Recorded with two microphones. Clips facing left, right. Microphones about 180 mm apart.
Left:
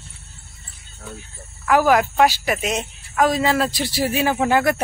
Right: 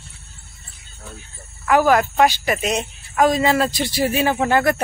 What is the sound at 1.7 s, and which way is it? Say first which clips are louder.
A woman's voice: right 1 dB; 5° left (ahead or behind).